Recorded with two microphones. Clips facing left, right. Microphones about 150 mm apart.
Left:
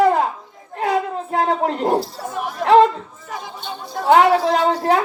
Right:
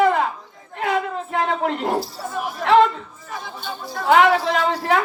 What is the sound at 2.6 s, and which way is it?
Chatter, 40° left (ahead or behind).